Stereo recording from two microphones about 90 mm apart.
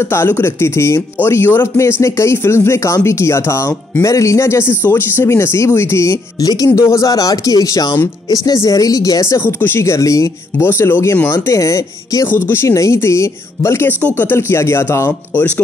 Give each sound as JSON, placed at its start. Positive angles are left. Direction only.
{"t": 0.0, "sound": "speech", "side_deg": 30}
{"t": 6.4, "sound": "speech", "side_deg": 45}
{"t": 10.7, "sound": "speech", "side_deg": 25}
{"t": 12.3, "sound": "speech", "side_deg": 25}
{"t": 15.3, "sound": "speech", "side_deg": 15}